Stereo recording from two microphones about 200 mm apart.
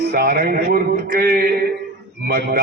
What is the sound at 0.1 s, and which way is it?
A man's voice, 50° right (ahead or behind).